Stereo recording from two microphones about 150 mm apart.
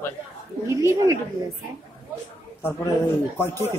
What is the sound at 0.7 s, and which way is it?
Speech, 20° right (ahead or behind).